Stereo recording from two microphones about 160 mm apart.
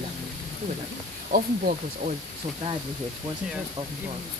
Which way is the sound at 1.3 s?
60° right (ahead or behind).